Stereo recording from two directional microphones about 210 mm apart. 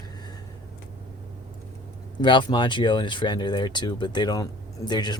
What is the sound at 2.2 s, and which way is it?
Speech, 20° left (ahead or behind).